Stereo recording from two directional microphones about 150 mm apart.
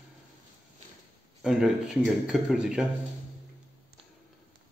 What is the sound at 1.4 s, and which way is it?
Speech, 5° right (ahead or behind).